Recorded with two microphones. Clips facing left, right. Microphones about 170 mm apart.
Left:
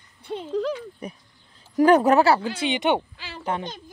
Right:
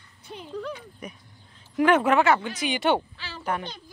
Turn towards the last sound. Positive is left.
turn(degrees=20)  # may be behind; listen again after turning